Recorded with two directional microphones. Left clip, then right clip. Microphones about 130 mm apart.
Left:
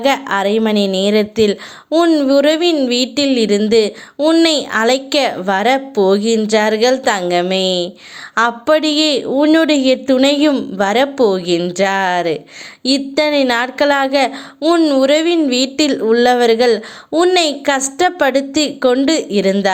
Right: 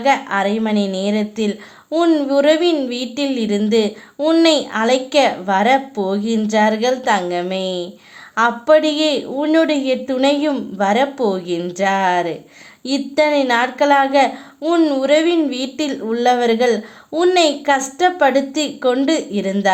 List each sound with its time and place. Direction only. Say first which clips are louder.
0.0 s a woman's voice: left 1 dB; 40° left (ahead or behind)
1.9 s a woman's voice: left 3 dB; 20° left (ahead or behind)
2.2 s a woman's voice: left 2 dB; 30° left (ahead or behind)
4.2 s a woman's voice: left 3 dB; 20° left (ahead or behind)
4.4 s a woman's voice: left 1 dB; 30° left (ahead or behind)